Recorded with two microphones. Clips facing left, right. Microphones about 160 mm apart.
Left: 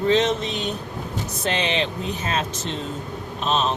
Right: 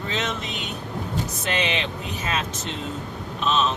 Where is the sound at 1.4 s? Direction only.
30° left (ahead or behind).